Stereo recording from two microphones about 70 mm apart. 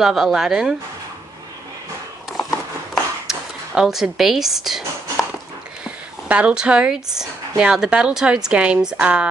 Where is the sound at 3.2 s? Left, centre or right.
Centre.